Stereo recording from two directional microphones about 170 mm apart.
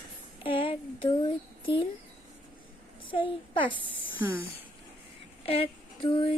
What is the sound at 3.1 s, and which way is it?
A child's voice, 30° left (ahead or behind).